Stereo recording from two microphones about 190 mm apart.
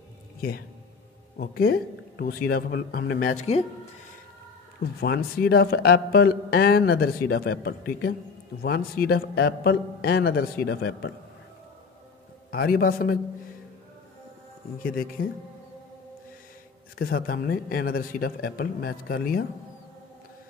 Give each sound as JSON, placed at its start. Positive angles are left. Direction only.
{"t": 1.4, "sound": "speech", "side_deg": 50}
{"t": 5.0, "sound": "speech", "side_deg": 55}
{"t": 12.4, "sound": "speech", "side_deg": 50}
{"t": 14.8, "sound": "speech", "side_deg": 50}
{"t": 17.0, "sound": "speech", "side_deg": 50}